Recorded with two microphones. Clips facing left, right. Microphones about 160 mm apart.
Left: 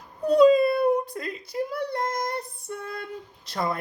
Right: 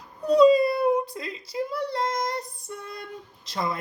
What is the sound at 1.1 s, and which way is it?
Speech, 60° left (ahead or behind).